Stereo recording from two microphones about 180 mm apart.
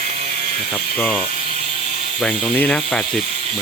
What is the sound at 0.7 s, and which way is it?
Speech, centre (ahead or behind).